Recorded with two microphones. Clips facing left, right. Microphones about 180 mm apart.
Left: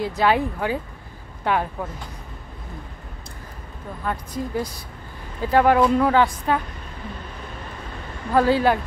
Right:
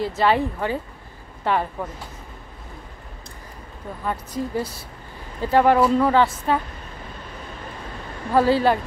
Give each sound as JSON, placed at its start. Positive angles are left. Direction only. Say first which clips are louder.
{"t": 0.2, "sound": "speech", "louder": "even", "side_deg": 5}
{"t": 4.0, "sound": "speech", "louder": "right 1 dB", "side_deg": -5}
{"t": 8.3, "sound": "speech", "louder": "even", "side_deg": -5}